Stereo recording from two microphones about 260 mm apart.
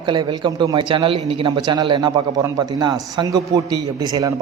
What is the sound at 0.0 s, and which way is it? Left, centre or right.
A man's voice, centre.